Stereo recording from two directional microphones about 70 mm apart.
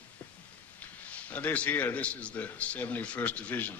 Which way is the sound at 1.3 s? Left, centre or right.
Left.